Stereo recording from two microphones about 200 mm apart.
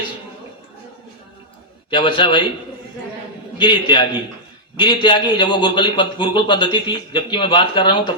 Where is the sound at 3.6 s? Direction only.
25° left (ahead or behind).